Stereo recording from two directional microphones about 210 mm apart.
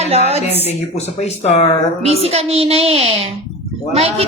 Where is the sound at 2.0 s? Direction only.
30° right (ahead or behind).